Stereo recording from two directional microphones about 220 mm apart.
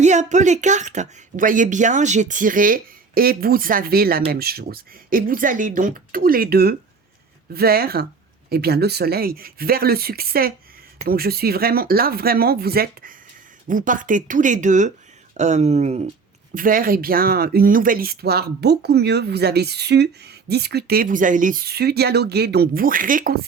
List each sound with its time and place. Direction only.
0.0 s speech: 30° right (ahead or behind)